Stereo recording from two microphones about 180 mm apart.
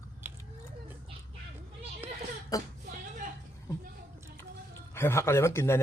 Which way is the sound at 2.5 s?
20° left (ahead or behind).